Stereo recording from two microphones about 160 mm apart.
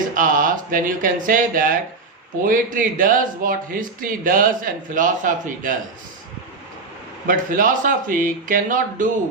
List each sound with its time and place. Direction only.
0.0 s speech: 60° right (ahead or behind)
7.3 s speech: 55° right (ahead or behind)